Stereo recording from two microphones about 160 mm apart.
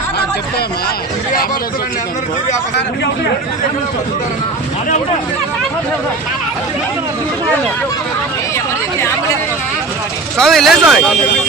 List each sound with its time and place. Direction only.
10.3 s speech: centre (ahead or behind)